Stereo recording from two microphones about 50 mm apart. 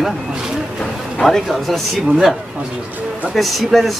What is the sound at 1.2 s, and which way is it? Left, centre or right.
Speech, centre.